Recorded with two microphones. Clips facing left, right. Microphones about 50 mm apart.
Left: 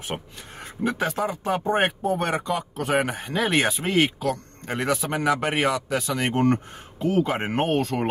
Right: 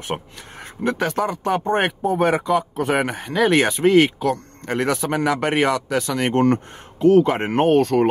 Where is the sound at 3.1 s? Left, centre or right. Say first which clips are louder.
Right 6 dB; right.